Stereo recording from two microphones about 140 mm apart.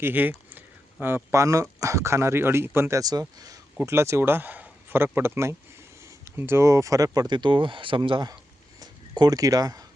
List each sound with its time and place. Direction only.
0.0 s speech: 15° right (ahead or behind)